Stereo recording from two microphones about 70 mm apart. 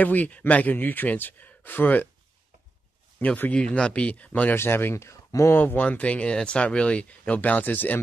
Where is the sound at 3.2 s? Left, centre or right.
Left.